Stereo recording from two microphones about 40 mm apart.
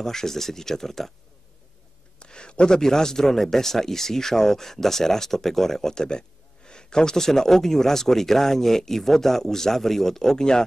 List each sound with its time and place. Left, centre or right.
0.0 s speech: centre
2.1 s a sound: left
2.8 s speech: centre